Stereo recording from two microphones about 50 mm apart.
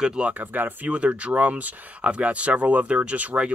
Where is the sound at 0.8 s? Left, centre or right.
Right.